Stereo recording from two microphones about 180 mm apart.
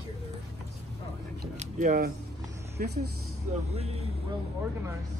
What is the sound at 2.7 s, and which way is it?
Speech, 65° right (ahead or behind).